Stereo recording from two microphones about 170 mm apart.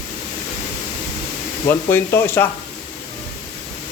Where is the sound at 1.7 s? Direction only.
15° left (ahead or behind).